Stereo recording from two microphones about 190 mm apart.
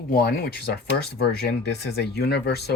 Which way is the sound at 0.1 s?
55° left (ahead or behind).